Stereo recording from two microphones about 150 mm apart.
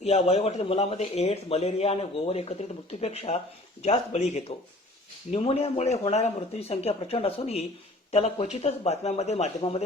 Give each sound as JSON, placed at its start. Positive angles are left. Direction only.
{"t": 0.0, "sound": "speech", "side_deg": 45}